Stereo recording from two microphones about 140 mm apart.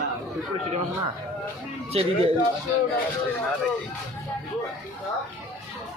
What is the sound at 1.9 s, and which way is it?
Speech, 45° right (ahead or behind).